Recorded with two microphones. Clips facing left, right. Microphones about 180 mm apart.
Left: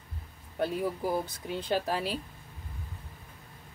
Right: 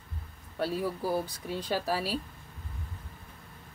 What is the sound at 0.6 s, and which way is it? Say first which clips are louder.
Speech: left 1 dB; 20° left (ahead or behind).